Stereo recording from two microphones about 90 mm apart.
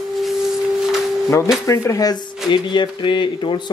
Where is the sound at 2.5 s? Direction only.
60° left (ahead or behind).